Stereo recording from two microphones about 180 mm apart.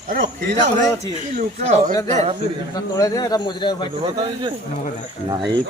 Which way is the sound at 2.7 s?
20° left (ahead or behind).